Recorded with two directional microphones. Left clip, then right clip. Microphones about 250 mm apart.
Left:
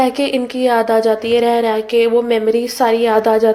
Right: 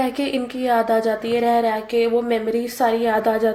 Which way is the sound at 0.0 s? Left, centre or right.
Left.